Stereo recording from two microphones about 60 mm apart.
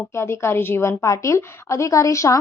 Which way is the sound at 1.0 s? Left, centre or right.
Left.